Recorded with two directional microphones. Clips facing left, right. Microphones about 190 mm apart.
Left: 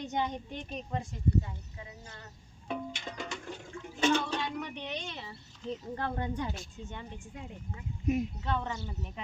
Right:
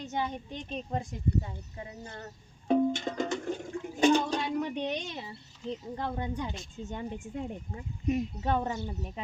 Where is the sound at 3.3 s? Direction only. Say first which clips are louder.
Right 8 dB; 45° right (ahead or behind).